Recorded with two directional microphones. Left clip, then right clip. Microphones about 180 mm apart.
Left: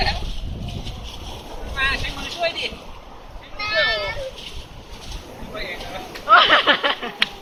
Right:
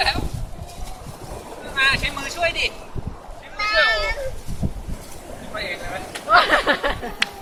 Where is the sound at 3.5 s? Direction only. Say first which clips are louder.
Right 2 dB; 10° right (ahead or behind).